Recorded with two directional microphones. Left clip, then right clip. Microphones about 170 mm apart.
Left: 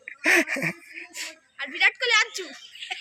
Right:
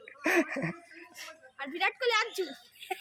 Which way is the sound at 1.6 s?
40° right (ahead or behind).